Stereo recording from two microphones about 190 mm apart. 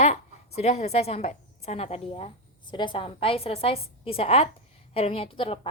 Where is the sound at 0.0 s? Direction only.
35° left (ahead or behind).